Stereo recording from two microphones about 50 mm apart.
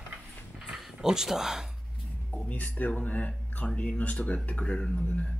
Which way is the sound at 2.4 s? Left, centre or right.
Left.